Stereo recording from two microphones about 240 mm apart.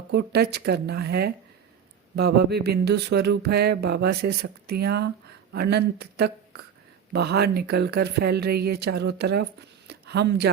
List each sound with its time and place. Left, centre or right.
0.1 s a woman's voice: right